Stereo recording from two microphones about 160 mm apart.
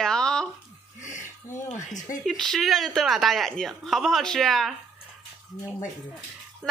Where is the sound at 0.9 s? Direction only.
50° left (ahead or behind).